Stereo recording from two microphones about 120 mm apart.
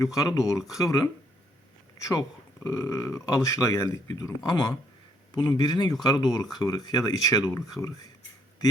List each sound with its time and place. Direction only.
0.0 s speech: 25° left (ahead or behind)